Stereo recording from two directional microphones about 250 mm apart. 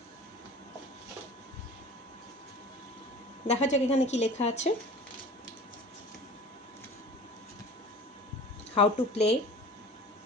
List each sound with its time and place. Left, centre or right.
3.4 s a woman's voice: left
8.7 s a woman's voice: left